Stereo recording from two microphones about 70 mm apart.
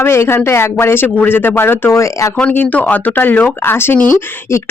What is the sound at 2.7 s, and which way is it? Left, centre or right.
Speech, left.